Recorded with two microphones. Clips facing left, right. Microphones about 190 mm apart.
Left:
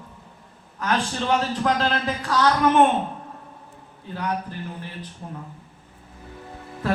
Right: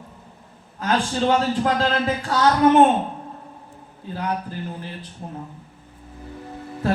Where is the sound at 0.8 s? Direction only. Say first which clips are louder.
Right 3 dB; 30° right (ahead or behind).